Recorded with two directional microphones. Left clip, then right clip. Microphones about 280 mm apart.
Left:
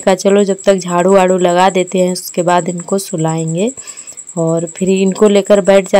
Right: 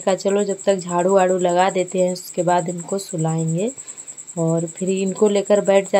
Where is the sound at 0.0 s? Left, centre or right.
Left.